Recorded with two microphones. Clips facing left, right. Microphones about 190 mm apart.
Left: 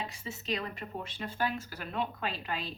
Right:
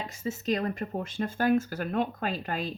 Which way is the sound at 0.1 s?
45° right (ahead or behind).